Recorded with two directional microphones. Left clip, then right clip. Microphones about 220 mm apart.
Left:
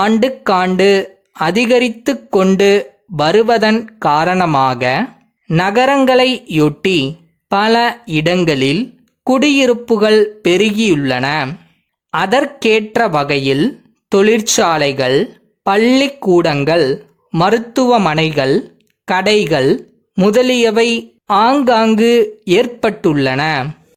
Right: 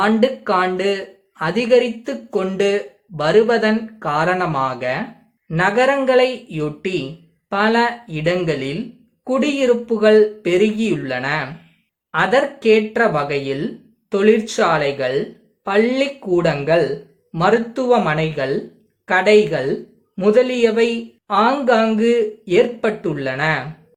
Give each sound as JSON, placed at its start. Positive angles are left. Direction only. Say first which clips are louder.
{"t": 0.0, "sound": "speech", "louder": "left 3 dB", "side_deg": 50}